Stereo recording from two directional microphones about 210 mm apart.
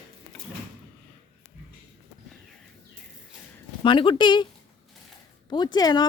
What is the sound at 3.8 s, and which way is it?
Speech, 25° left (ahead or behind).